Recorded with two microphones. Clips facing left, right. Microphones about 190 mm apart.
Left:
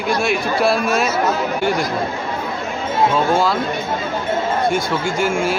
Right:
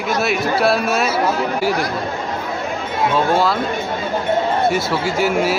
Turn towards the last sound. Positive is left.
turn(degrees=-5)  # may be behind; listen again after turning